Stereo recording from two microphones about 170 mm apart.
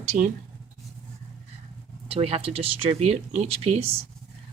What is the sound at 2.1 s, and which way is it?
Speech, 35° right (ahead or behind).